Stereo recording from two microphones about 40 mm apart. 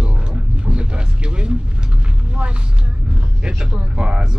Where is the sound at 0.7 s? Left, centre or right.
Right.